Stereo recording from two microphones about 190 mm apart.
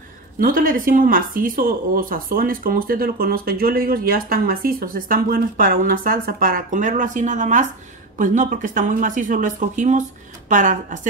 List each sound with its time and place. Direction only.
0.4 s speech: 50° right (ahead or behind)